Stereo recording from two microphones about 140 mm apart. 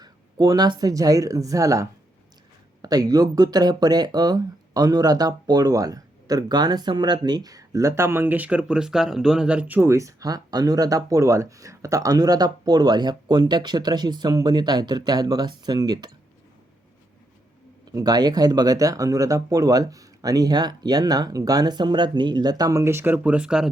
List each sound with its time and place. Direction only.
0.0 s speech: 30° right (ahead or behind)
17.9 s speech: 25° right (ahead or behind); by 23.6 s 5° right (ahead or behind)